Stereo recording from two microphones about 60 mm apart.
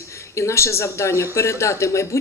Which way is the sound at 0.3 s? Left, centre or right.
Left.